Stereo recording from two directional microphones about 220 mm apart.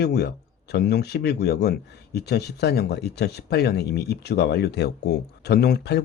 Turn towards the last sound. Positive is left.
turn(degrees=50)  # may be behind; listen again after turning